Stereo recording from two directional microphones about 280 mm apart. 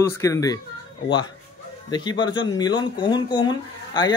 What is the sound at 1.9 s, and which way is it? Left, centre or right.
Speech, centre.